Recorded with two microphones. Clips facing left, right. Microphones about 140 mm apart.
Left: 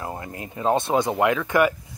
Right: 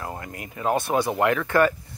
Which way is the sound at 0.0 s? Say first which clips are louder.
Left 2 dB; 25° left (ahead or behind).